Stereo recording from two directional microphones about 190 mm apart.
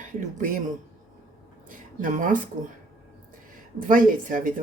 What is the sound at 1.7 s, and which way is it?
Speech, 45° right (ahead or behind).